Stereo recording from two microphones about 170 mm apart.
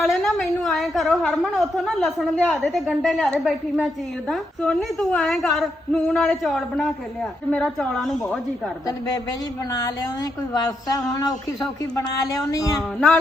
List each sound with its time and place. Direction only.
0.0 s a woman's voice: centre (ahead or behind)
10.5 s a man's voice: 20° left (ahead or behind)